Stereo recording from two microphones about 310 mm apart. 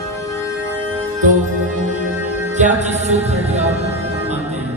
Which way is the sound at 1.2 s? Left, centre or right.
Right.